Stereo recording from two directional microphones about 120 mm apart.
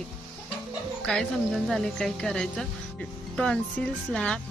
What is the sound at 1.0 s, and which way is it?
Speech, 5° left (ahead or behind).